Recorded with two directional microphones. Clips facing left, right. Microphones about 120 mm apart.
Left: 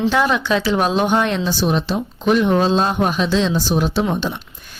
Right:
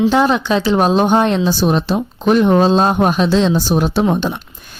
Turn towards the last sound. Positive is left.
turn(degrees=-45)  # may be behind; listen again after turning